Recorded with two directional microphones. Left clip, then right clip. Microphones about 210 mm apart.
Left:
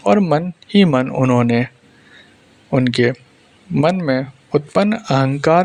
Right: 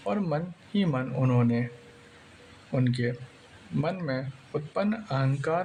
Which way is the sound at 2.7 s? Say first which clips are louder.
Left 14 dB; 40° left (ahead or behind).